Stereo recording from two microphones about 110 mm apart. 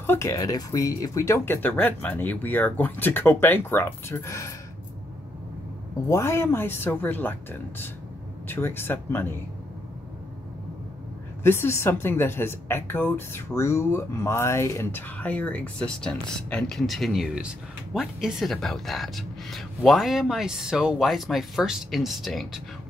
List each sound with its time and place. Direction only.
0.0 s speech: 20° left (ahead or behind)
6.0 s speech: 25° left (ahead or behind)
8.5 s speech: 20° left (ahead or behind)
11.4 s speech: 20° left (ahead or behind); by 22.6 s centre (ahead or behind)